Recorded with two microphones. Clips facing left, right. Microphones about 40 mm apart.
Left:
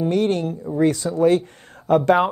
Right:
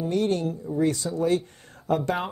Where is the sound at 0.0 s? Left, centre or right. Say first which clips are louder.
Left 5 dB; left.